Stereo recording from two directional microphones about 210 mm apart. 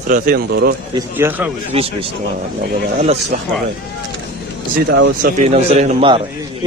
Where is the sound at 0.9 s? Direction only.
10° right (ahead or behind).